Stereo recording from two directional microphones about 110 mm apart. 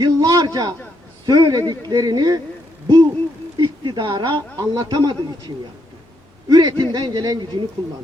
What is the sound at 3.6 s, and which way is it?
Speech, 40° right (ahead or behind).